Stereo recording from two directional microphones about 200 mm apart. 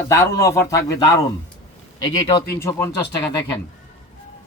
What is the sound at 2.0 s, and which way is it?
A man's voice, 20° left (ahead or behind).